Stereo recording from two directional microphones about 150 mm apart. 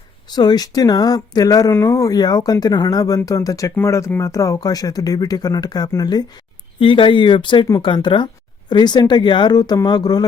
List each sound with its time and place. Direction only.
0.3 s speech: 25° left (ahead or behind)